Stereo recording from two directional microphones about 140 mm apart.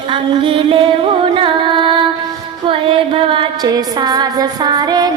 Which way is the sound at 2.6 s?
40° right (ahead or behind).